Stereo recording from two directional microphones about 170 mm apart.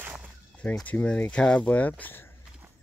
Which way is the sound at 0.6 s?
10° left (ahead or behind).